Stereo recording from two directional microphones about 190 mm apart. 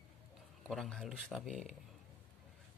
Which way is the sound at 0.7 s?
Centre (ahead or behind).